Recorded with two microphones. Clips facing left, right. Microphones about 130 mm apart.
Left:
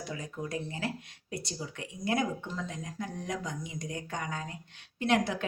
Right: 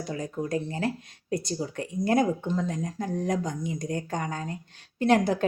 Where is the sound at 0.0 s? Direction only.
40° right (ahead or behind).